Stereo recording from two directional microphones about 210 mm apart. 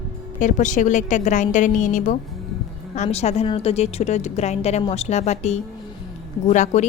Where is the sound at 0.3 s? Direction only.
35° left (ahead or behind).